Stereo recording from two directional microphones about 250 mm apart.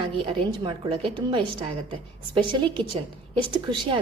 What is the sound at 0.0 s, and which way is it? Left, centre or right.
A woman's voice, right.